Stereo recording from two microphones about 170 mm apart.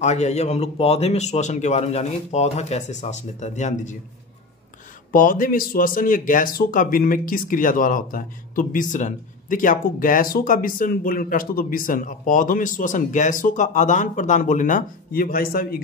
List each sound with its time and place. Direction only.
0.0 s speech: 40° left (ahead or behind)
5.1 s speech: 55° left (ahead or behind)